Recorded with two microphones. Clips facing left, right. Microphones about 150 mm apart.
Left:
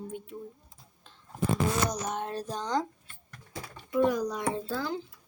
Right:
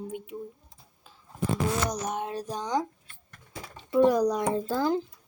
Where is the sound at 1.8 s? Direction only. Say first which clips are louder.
Right 2 dB; 15° right (ahead or behind).